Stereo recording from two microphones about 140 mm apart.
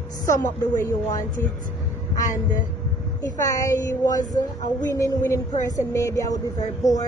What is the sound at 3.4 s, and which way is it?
A woman's voice, 25° left (ahead or behind).